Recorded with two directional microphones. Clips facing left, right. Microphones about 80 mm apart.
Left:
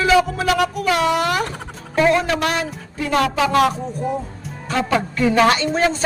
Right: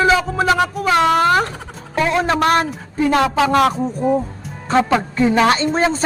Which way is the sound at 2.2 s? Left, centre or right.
Right.